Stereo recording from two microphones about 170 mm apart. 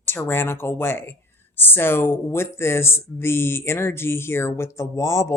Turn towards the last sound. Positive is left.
turn(degrees=15)  # may be behind; listen again after turning